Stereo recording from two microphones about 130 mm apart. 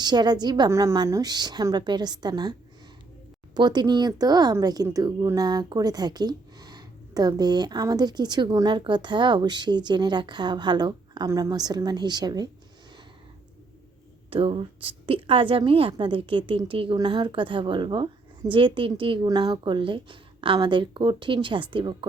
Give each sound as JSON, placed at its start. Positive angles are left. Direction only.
{"t": 0.0, "sound": "a woman's voice", "side_deg": -30}
{"t": 0.7, "sound": "a woman's voice", "side_deg": -20}
{"t": 14.3, "sound": "a woman's voice", "side_deg": -45}